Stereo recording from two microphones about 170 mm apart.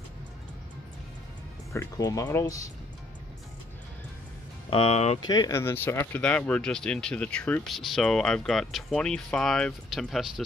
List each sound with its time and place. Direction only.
1.7 s speech: 20° left (ahead or behind)
4.6 s speech: 35° left (ahead or behind)
5.2 s speech: 25° left (ahead or behind); by 10.4 s centre (ahead or behind)